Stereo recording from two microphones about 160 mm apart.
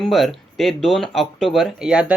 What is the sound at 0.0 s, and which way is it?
Speech, centre (ahead or behind).